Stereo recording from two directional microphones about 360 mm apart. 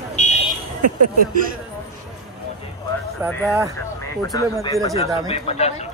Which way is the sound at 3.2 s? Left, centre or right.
Centre.